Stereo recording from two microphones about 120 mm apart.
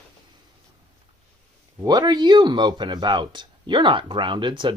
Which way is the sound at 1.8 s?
35° right (ahead or behind).